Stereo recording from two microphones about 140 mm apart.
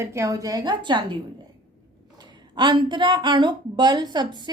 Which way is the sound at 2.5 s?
35° right (ahead or behind).